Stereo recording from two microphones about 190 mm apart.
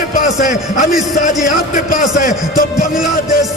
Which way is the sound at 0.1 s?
45° left (ahead or behind).